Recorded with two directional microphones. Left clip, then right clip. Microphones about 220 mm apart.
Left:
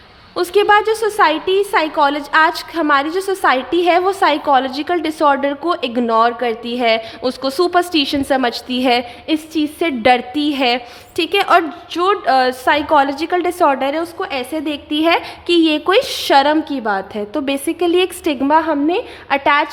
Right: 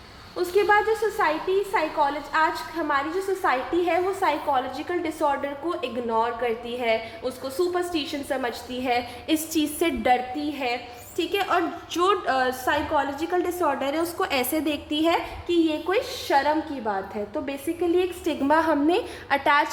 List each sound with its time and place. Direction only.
0.3 s a woman's voice: 45° left (ahead or behind)
9.2 s a woman's voice: 25° left (ahead or behind)
10.0 s a woman's voice: 40° left (ahead or behind)
11.2 s a woman's voice: 35° left (ahead or behind)
15.4 s a woman's voice: 45° left (ahead or behind)
18.4 s a woman's voice: 20° left (ahead or behind)